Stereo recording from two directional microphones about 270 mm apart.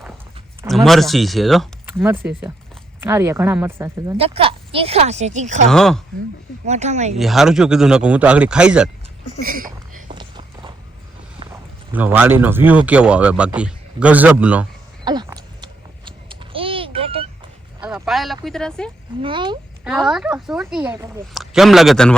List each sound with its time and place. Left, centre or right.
0.9 s a woman's voice: centre
4.2 s speech: right
5.6 s a woman's voice: centre
6.7 s speech: right
7.2 s a woman's voice: centre
9.4 s a sound: right
10.2 s walk: centre
11.3 s speech: centre
15.0 s babbling: centre
17.7 s a sound: centre
18.4 s a woman's voice: centre
19.2 s speech: centre
19.8 s a woman's voice: centre